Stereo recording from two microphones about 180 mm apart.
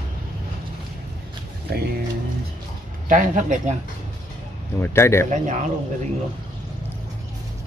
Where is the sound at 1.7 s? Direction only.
60° right (ahead or behind).